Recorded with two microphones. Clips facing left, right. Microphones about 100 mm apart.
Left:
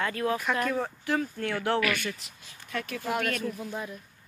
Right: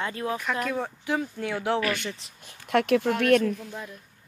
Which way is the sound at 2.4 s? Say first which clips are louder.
Right 11 dB; 70° right (ahead or behind).